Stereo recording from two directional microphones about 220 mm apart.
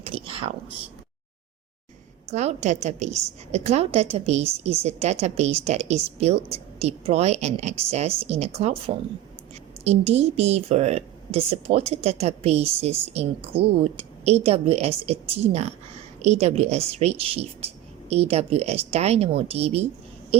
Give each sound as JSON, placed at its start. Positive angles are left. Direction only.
{"t": 0.0, "sound": "whispering", "side_deg": -25}
{"t": 2.3, "sound": "a woman's voice", "side_deg": -30}